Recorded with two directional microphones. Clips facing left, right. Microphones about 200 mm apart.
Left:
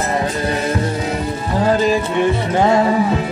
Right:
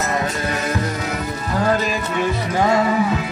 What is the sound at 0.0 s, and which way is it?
Music, 30° left (ahead or behind).